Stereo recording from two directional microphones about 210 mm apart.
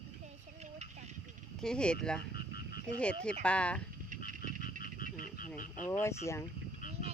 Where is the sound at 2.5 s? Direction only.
45° left (ahead or behind).